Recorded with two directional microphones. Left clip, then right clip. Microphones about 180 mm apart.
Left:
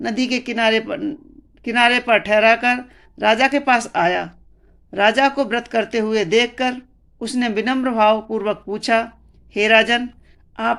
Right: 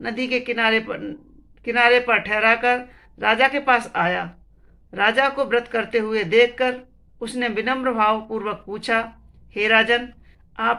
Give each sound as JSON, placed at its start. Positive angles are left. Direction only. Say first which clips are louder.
{"t": 0.0, "sound": "a woman's voice", "louder": "left 2 dB", "side_deg": 45}